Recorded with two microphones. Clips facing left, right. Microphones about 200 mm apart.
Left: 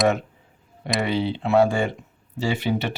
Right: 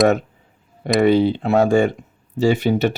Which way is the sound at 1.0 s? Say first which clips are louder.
Right 10 dB; 50° right (ahead or behind).